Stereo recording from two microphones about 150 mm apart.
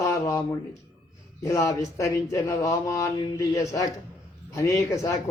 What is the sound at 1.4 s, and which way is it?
A man's voice, 20° left (ahead or behind).